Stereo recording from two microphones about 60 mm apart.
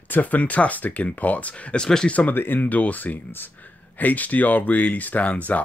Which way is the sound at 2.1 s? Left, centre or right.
Left.